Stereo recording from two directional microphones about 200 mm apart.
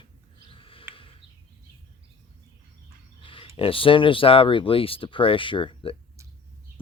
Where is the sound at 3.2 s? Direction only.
25° left (ahead or behind).